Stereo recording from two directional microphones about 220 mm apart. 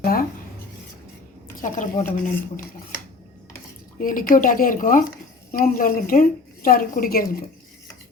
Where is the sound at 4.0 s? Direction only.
40° left (ahead or behind).